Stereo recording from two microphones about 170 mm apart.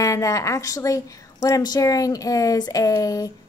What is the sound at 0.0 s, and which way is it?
A woman's voice, 20° left (ahead or behind).